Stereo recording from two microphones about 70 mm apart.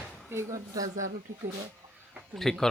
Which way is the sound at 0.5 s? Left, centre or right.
Right.